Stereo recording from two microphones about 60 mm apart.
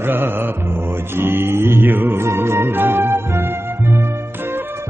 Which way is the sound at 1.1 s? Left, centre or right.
Right.